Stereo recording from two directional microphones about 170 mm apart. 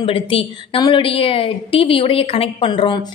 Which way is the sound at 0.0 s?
30° left (ahead or behind).